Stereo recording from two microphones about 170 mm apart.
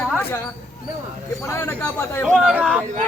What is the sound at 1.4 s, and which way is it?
Speech, 15° left (ahead or behind).